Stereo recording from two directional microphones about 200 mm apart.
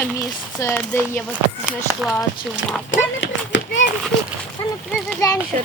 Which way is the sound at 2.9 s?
65° left (ahead or behind).